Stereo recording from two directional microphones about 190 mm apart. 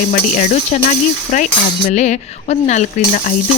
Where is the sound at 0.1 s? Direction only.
40° left (ahead or behind).